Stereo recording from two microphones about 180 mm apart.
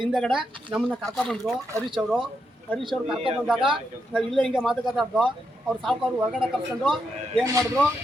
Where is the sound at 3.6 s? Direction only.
30° right (ahead or behind).